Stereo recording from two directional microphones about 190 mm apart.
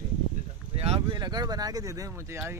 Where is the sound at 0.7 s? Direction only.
30° right (ahead or behind); by 2.4 s 15° right (ahead or behind).